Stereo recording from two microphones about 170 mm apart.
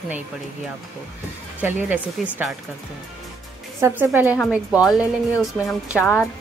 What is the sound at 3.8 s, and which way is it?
Speech, 15° right (ahead or behind).